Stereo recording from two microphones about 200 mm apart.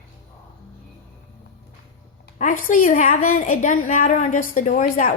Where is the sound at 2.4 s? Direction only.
40° left (ahead or behind).